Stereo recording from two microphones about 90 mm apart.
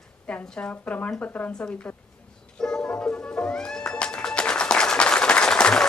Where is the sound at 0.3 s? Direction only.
15° left (ahead or behind).